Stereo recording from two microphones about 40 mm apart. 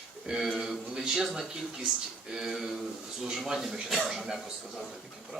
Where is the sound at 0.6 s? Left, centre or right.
Centre.